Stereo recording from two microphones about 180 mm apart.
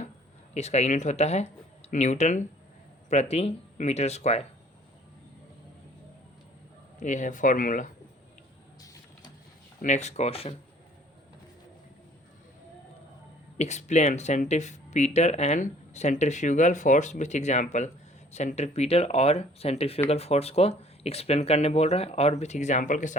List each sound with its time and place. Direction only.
0.5 s speech: 40° left (ahead or behind)
7.0 s speech: 45° left (ahead or behind)
8.8 s printer: 20° left (ahead or behind)
9.8 s speech: 40° left (ahead or behind)
13.6 s speech: 40° left (ahead or behind)